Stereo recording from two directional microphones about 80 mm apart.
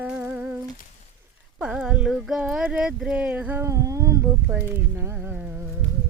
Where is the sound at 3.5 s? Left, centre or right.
Right.